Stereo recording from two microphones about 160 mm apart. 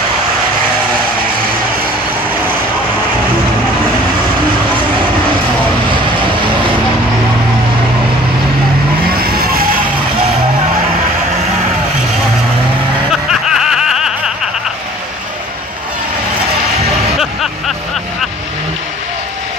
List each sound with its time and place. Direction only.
9.1 s vehicle: 70° right (ahead or behind)
13.1 s snicker: centre (ahead or behind)
17.2 s vehicle: centre (ahead or behind)